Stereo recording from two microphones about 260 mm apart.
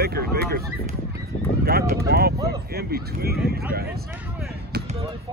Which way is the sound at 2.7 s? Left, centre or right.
Right.